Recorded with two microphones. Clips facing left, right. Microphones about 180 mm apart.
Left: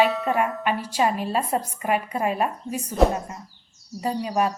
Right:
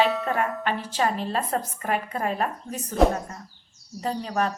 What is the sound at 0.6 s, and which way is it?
A woman's voice, 10° left (ahead or behind).